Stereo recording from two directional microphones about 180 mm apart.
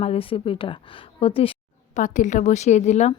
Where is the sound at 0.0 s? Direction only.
30° left (ahead or behind).